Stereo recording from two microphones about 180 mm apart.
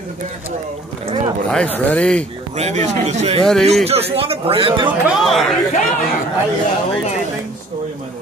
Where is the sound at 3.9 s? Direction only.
35° right (ahead or behind).